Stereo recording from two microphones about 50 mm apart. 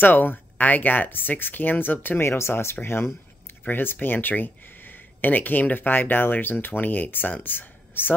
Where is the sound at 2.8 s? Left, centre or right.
Left.